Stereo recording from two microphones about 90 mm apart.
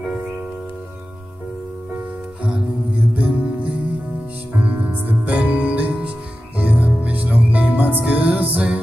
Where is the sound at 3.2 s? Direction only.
15° right (ahead or behind).